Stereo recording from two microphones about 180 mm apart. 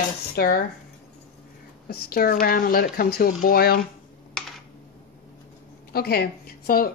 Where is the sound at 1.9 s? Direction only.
60° left (ahead or behind).